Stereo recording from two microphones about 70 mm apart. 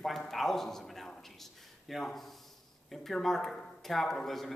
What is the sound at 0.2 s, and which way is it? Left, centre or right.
A man's voice, centre.